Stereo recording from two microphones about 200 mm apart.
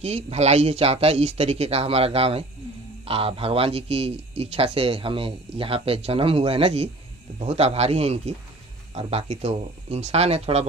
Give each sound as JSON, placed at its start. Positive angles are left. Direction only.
{"t": 0.0, "sound": "speech", "side_deg": -30}